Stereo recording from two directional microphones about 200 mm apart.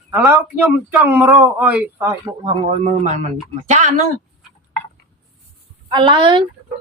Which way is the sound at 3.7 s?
35° right (ahead or behind).